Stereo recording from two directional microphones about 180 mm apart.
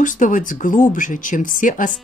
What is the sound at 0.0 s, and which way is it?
Speech, 45° left (ahead or behind).